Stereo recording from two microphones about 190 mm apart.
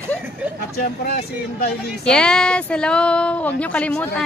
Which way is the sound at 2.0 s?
5° left (ahead or behind).